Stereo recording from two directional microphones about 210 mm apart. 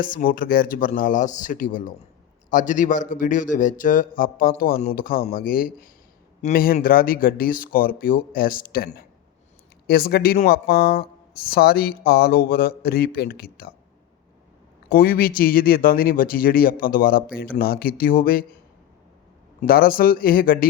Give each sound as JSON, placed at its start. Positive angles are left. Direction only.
{"t": 0.0, "sound": "speech", "side_deg": 40}
{"t": 14.8, "sound": "speech", "side_deg": 45}
{"t": 19.6, "sound": "speech", "side_deg": 45}